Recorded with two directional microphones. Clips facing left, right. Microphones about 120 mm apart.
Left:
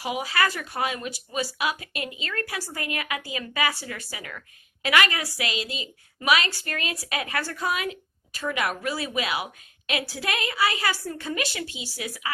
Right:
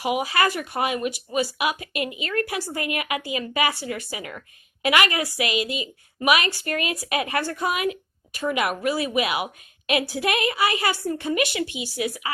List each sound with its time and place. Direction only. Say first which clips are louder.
0.0 s a woman's voice: right 4 dB; 15° right (ahead or behind)
4.8 s a woman's voice: right 2 dB; 15° right (ahead or behind)